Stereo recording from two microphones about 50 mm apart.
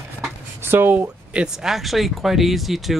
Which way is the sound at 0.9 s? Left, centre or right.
Right.